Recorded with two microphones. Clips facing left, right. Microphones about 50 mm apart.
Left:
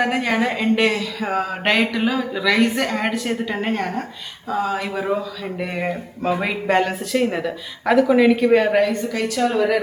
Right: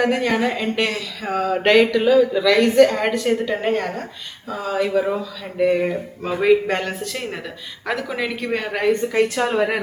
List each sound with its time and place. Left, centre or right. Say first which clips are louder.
0.0 s speech: right 1 dB; centre
8.8 s a woman's voice: right 2 dB; right